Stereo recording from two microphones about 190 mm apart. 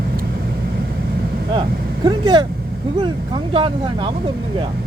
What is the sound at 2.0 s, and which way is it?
Speech, 25° right (ahead or behind).